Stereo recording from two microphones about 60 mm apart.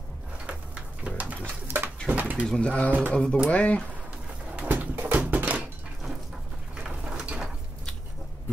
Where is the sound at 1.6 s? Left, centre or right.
Right.